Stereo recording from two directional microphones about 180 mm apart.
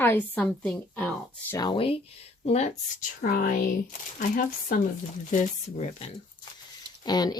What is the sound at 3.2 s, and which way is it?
Speech, 55° left (ahead or behind).